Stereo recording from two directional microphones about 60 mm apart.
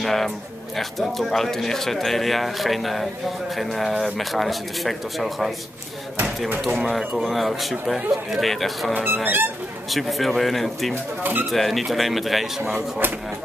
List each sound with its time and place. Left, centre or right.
0.0 s speech: centre
6.6 s speech: centre
7.2 s speech: centre
8.9 s speech: right
9.8 s speech: centre